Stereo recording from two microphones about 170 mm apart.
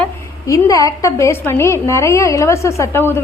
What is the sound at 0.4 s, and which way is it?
A woman's voice, 20° left (ahead or behind).